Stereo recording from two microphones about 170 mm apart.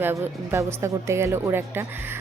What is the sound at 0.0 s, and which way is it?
A woman's voice, 15° right (ahead or behind).